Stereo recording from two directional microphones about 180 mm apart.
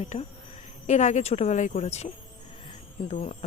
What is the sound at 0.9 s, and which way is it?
Speech, 40° left (ahead or behind).